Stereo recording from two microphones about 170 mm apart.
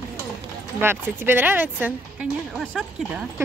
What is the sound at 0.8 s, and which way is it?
Speech, 15° right (ahead or behind).